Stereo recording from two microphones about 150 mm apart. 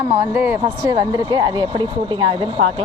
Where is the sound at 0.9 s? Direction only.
30° right (ahead or behind).